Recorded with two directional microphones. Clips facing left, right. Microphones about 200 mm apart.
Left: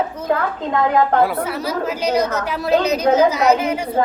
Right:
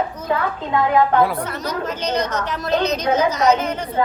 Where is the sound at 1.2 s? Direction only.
5° left (ahead or behind).